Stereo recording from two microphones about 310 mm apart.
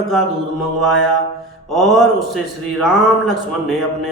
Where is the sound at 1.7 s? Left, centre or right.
Centre.